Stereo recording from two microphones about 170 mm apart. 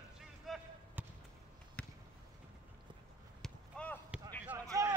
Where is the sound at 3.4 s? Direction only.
5° left (ahead or behind).